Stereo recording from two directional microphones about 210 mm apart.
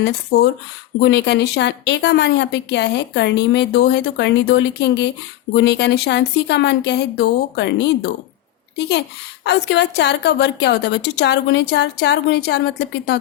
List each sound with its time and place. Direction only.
0.3 s speech: 90° left
1.0 s a woman's voice: 55° left (ahead or behind)
8.9 s a woman's voice: 55° left (ahead or behind)